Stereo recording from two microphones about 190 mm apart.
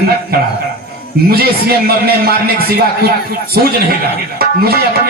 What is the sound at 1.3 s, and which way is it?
A man's voice, 55° right (ahead or behind).